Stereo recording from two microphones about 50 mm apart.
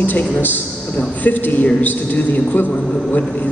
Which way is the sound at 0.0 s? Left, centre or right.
Left.